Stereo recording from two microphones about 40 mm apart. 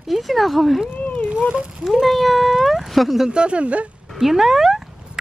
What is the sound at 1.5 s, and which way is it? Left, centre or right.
Speech, right.